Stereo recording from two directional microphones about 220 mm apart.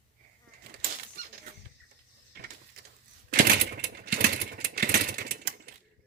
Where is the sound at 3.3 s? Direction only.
40° right (ahead or behind).